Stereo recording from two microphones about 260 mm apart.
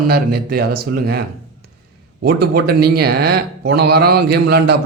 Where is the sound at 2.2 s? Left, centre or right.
Right.